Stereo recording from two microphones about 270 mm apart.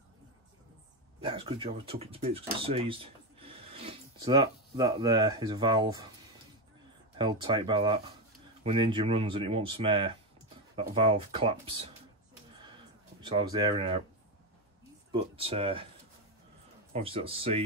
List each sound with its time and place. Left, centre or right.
1.2 s speech: centre
7.2 s speech: centre
13.2 s speech: centre
15.3 s speech: right
16.9 s speech: right